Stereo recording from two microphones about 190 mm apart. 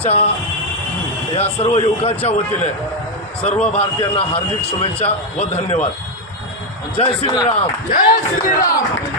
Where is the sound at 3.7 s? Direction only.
30° left (ahead or behind).